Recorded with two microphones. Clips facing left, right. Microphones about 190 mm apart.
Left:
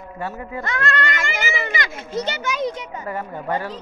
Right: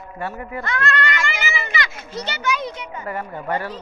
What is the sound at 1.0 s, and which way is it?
Speech, 45° left (ahead or behind).